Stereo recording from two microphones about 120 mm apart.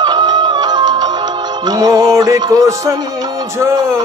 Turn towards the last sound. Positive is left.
turn(degrees=-20)  # may be behind; listen again after turning